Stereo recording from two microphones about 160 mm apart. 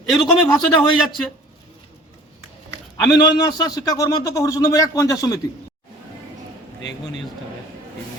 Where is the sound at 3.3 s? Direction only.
25° left (ahead or behind).